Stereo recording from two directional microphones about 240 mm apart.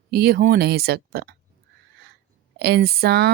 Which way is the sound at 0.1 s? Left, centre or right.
Right.